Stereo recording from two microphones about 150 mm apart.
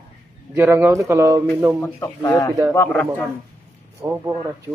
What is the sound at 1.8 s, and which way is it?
A man's voice, 20° left (ahead or behind).